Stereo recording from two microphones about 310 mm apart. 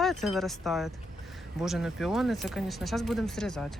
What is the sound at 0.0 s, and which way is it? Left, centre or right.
Speech, centre.